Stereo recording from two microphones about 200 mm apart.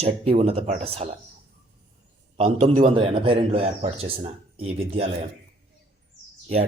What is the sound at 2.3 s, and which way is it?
A man's voice, 30° right (ahead or behind).